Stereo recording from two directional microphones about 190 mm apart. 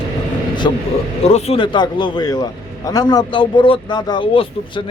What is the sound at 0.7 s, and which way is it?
Speech, 20° left (ahead or behind).